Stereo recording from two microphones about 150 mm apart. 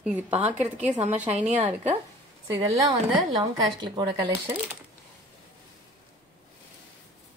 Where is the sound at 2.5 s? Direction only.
20° right (ahead or behind).